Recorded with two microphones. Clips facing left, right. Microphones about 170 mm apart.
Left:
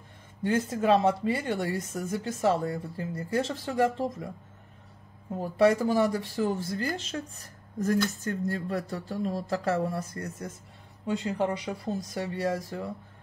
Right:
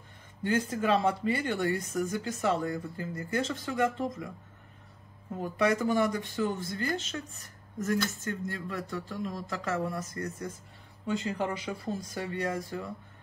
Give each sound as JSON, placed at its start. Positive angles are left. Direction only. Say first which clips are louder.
{"t": 0.4, "sound": "speech", "louder": "left 2 dB", "side_deg": 25}
{"t": 5.4, "sound": "speech", "louder": "left 5 dB", "side_deg": 30}